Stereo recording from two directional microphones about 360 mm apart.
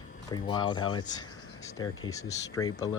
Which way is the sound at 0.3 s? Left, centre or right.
Centre.